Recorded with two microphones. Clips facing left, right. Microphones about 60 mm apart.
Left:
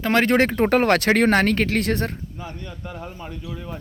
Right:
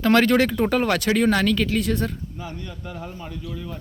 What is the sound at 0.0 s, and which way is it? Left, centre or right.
Speech, left.